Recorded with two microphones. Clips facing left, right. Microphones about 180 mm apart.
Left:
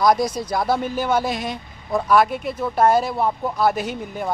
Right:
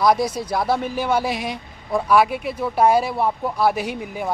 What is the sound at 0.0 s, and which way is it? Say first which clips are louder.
A man's voice: even; 5° right (ahead or behind).